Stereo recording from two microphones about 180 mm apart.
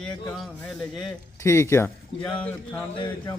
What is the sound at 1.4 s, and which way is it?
Speech, 15° left (ahead or behind).